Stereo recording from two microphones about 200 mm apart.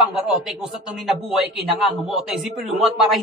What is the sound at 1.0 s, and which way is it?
Speech, centre (ahead or behind).